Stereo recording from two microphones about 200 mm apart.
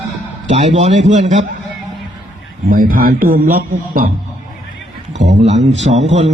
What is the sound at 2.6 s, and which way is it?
Speech, 45° right (ahead or behind).